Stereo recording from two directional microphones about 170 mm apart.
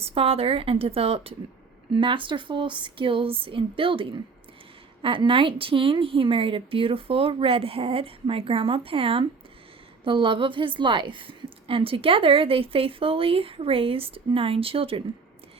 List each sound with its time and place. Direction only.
0.0 s a woman's voice: 35° right (ahead or behind)